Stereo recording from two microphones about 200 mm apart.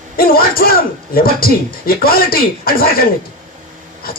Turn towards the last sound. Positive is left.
turn(degrees=50)  # may be behind; listen again after turning